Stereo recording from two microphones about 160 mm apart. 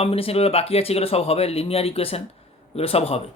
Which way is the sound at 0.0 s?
35° left (ahead or behind).